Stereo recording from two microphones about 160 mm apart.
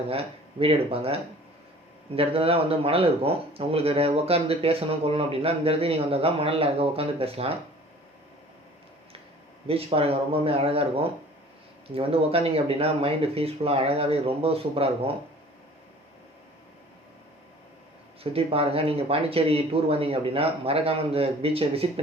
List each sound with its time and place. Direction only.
0.1 s speech: 35° right (ahead or behind)
9.6 s speech: 35° right (ahead or behind)
18.2 s speech: 35° right (ahead or behind)